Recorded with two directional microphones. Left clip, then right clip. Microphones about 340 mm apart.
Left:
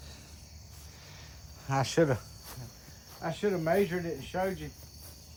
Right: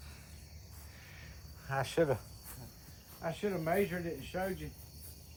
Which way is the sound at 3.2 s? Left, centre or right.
Left.